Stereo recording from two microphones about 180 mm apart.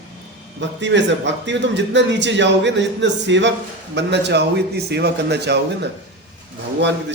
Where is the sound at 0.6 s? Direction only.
85° right.